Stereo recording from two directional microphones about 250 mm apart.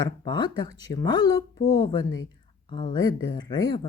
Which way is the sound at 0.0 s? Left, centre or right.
Centre.